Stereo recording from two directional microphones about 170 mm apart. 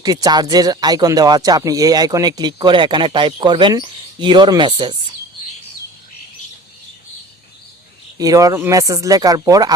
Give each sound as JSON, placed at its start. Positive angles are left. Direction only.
{"t": 0.0, "sound": "speech", "side_deg": -25}
{"t": 8.2, "sound": "speech", "side_deg": -20}